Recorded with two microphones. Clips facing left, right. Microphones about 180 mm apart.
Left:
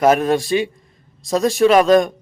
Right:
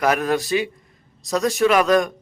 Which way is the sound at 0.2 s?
25° left (ahead or behind).